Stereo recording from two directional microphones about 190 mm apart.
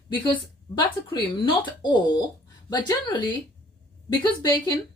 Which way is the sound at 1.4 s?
25° left (ahead or behind).